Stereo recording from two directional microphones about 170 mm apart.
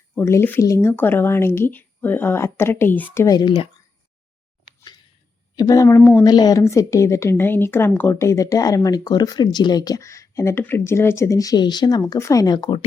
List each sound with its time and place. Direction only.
0.1 s speech: 15° left (ahead or behind)
3.2 s a woman's voice: 25° left (ahead or behind)
5.5 s a woman's voice: 20° left (ahead or behind)